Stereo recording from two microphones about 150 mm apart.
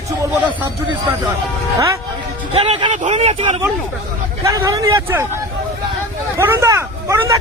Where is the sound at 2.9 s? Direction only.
45° right (ahead or behind).